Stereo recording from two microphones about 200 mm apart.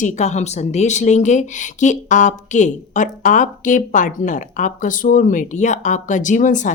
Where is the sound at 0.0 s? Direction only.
35° left (ahead or behind).